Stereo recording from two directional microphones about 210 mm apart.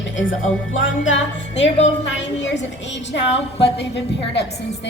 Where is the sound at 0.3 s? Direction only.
65° left (ahead or behind).